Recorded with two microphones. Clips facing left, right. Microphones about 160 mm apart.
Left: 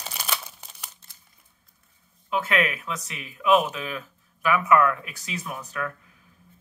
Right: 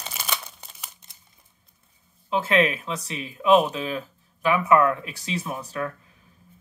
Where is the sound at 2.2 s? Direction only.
30° right (ahead or behind).